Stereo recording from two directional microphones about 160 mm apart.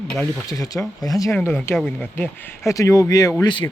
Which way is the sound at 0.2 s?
20° left (ahead or behind).